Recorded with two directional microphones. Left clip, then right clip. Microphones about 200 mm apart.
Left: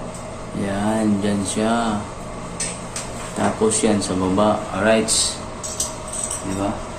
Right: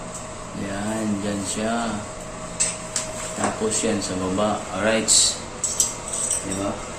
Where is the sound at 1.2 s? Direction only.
20° left (ahead or behind).